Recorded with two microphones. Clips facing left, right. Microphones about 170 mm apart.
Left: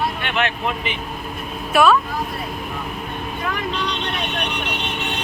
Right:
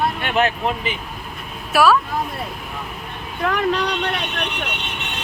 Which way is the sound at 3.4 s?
70° right (ahead or behind).